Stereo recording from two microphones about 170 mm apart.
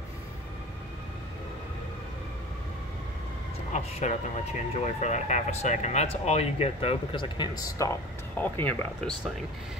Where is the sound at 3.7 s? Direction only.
40° left (ahead or behind); by 7.9 s 20° left (ahead or behind).